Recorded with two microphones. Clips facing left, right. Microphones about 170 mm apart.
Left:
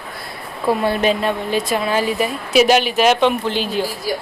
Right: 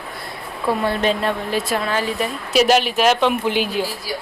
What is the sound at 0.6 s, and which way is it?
Speech, 10° left (ahead or behind).